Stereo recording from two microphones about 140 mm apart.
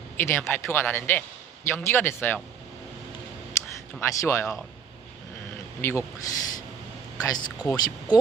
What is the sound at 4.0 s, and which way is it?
Speech, 20° left (ahead or behind).